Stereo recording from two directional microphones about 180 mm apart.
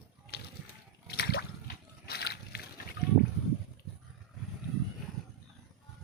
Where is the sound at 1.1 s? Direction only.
65° left (ahead or behind).